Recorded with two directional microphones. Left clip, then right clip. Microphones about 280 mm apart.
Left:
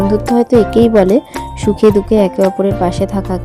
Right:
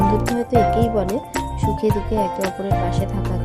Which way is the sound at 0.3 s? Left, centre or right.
Left.